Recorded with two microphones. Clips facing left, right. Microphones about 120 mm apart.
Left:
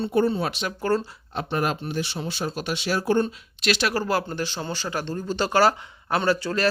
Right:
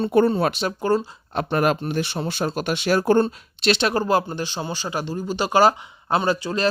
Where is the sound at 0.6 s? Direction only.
35° right (ahead or behind).